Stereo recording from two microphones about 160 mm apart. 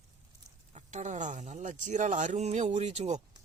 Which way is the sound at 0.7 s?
45° right (ahead or behind).